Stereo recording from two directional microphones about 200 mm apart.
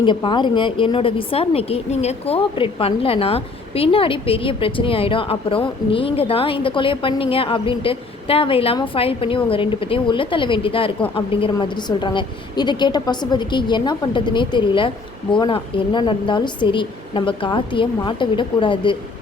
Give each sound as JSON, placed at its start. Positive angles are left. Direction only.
{"t": 0.0, "sound": "a woman's voice", "side_deg": 25}